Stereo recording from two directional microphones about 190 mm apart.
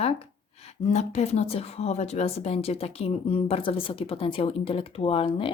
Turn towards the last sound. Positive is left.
turn(degrees=30)  # may be behind; listen again after turning